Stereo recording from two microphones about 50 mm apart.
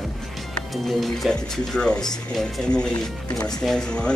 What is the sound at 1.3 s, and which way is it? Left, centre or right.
Speech, centre.